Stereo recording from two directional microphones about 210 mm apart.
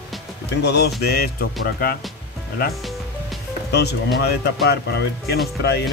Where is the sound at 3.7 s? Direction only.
50° left (ahead or behind).